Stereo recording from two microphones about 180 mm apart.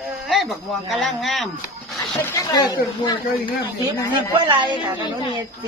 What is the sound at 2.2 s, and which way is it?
Speech, 20° left (ahead or behind).